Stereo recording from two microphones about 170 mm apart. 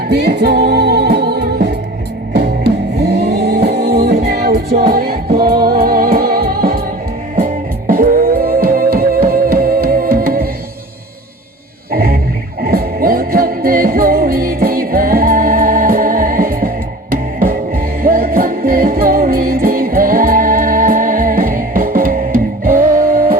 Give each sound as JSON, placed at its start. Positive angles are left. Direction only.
{"t": 0.1, "sound": "music", "side_deg": -75}
{"t": 11.9, "sound": "a sound", "side_deg": -65}
{"t": 12.6, "sound": "music", "side_deg": -65}